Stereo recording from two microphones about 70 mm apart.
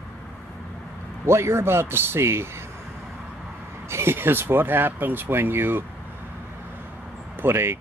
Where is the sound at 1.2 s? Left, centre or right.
Right.